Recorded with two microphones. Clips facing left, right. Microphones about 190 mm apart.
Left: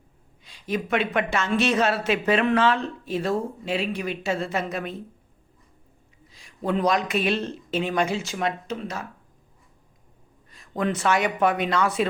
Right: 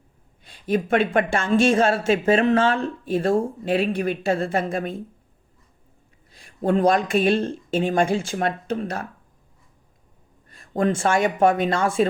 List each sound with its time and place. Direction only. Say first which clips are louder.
0.4 s speech: right 5 dB; 55° right (ahead or behind)
6.6 s speech: right 4 dB; 45° right (ahead or behind)
10.5 s speech: right 4 dB; 50° right (ahead or behind)